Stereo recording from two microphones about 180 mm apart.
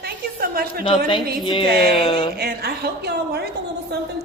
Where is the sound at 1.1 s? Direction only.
25° left (ahead or behind).